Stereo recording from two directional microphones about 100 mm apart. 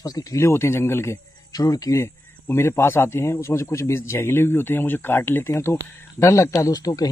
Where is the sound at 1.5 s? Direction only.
40° left (ahead or behind).